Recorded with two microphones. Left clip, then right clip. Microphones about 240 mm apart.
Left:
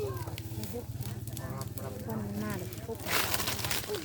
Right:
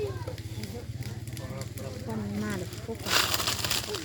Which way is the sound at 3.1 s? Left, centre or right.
Right.